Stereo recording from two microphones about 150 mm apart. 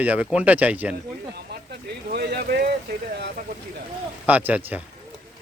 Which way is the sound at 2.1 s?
90° right.